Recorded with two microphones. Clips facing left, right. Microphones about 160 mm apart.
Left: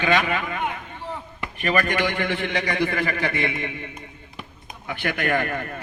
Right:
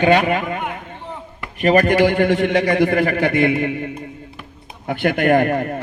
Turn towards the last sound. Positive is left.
turn(degrees=-35)  # may be behind; listen again after turning